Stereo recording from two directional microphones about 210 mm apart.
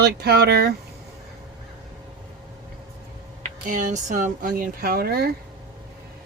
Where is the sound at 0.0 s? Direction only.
50° right (ahead or behind).